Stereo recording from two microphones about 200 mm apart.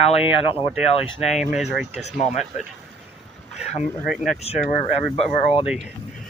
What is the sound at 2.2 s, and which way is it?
Speech, 35° left (ahead or behind).